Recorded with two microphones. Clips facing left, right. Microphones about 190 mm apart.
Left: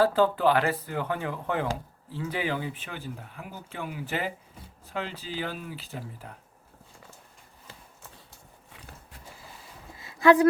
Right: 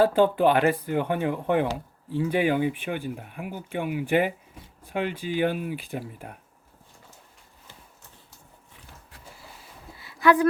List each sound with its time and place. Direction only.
0.0 s speech: 20° right (ahead or behind)